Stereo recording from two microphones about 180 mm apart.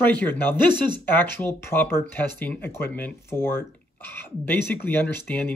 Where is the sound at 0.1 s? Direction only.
10° left (ahead or behind).